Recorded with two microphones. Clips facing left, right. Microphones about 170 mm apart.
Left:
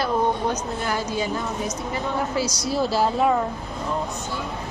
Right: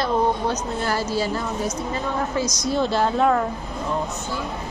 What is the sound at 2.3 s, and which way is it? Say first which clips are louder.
A woman's voice: right 1 dB; 10° left (ahead or behind).